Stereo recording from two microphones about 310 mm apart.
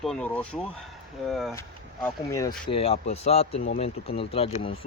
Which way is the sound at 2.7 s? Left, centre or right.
Centre.